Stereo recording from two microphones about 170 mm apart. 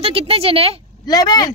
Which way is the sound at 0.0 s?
35° right (ahead or behind).